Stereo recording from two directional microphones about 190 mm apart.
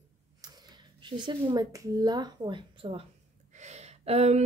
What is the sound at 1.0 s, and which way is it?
Speech, 25° right (ahead or behind).